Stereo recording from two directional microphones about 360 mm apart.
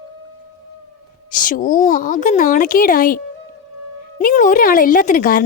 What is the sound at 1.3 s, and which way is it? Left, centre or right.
A woman's voice, left.